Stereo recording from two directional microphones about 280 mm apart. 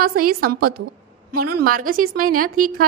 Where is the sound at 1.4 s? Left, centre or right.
Right.